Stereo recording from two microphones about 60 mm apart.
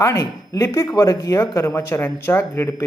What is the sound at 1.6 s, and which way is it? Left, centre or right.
Speech, left.